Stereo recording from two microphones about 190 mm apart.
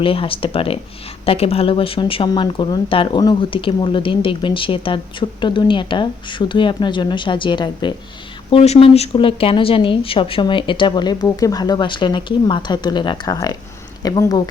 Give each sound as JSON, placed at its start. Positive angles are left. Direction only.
{"t": 0.0, "sound": "speech", "side_deg": 30}